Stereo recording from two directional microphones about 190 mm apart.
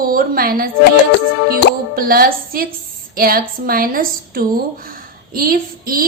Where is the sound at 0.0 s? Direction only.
50° right (ahead or behind).